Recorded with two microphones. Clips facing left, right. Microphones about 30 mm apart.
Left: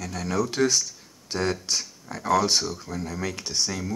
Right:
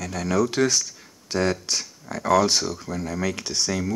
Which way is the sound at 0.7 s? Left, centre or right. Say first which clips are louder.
Right 1 dB; right.